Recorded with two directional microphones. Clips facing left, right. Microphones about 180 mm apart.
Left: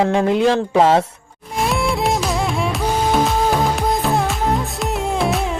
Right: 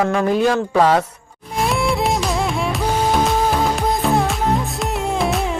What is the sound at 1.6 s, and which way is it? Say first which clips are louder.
Music: even; centre (ahead or behind).